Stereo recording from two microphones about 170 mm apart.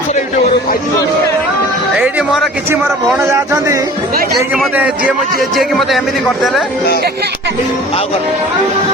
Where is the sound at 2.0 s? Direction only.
10° right (ahead or behind).